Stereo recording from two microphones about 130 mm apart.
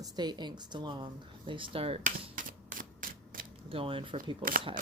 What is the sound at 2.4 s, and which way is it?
Typewriter, 90° right.